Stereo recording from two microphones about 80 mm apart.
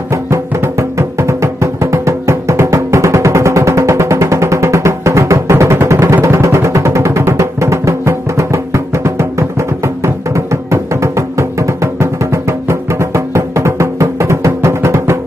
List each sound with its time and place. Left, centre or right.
0.1 s music: right